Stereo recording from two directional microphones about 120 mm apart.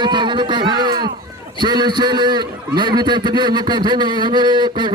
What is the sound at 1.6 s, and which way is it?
A man's voice, 40° right (ahead or behind).